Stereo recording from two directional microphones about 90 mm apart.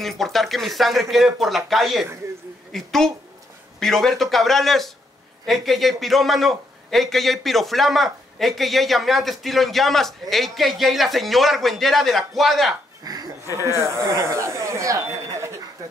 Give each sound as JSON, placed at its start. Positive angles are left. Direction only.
{"t": 0.0, "sound": "a man's voice", "side_deg": 0}
{"t": 13.0, "sound": "a sound", "side_deg": -45}
{"t": 13.5, "sound": "speech", "side_deg": -30}